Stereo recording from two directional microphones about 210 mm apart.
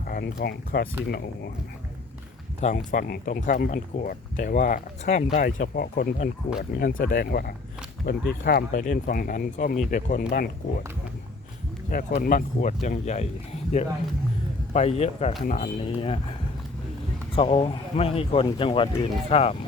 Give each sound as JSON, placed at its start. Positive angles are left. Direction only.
{"t": 0.0, "sound": "speech", "side_deg": 45}
{"t": 2.6, "sound": "speech", "side_deg": 35}
{"t": 11.9, "sound": "speech", "side_deg": 40}
{"t": 17.3, "sound": "speech", "side_deg": 25}